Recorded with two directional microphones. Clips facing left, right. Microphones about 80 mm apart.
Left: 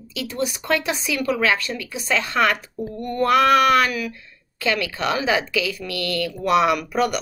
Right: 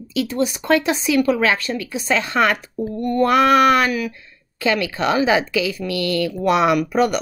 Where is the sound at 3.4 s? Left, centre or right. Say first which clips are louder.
Right 2 dB; right.